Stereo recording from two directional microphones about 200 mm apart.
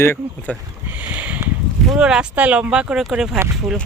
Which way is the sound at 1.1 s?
10° right (ahead or behind).